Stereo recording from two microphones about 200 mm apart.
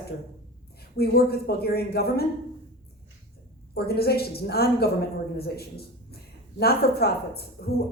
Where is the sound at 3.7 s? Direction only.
50° left (ahead or behind).